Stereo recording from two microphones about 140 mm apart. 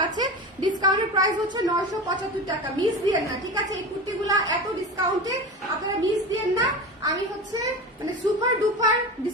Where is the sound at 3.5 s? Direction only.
25° right (ahead or behind).